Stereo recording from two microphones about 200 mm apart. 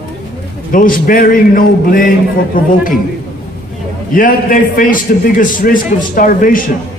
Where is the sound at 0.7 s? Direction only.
45° left (ahead or behind).